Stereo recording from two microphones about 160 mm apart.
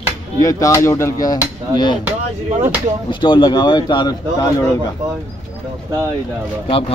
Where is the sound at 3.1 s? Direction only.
30° left (ahead or behind).